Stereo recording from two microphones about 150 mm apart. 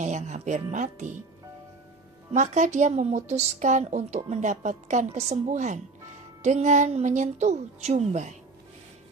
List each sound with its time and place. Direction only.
0.0 s a woman's voice: 55° right (ahead or behind)
2.3 s a woman's voice: 55° right (ahead or behind)